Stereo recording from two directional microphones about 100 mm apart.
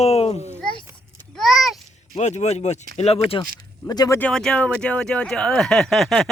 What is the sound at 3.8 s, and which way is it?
Speech, 40° left (ahead or behind).